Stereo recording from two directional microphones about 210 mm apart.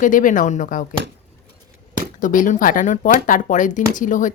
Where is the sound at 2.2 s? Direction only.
40° left (ahead or behind).